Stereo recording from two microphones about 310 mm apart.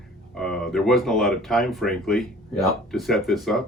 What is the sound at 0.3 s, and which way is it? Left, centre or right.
Speech, centre.